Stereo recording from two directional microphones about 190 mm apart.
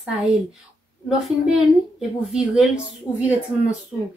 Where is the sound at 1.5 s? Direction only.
5° right (ahead or behind).